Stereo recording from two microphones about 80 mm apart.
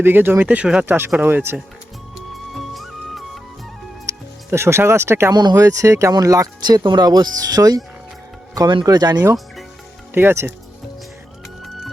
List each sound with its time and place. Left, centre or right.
0.0 s speech: right
0.3 s speech: centre
0.9 s speech: right
2.1 s music: centre
4.1 s music: right
4.5 s speech: right
5.3 s speech: right
5.5 s speech: right
6.7 s speech: right
10.2 s speech: right